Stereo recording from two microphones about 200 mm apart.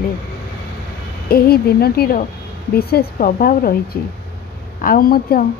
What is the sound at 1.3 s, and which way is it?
Speech, 50° left (ahead or behind).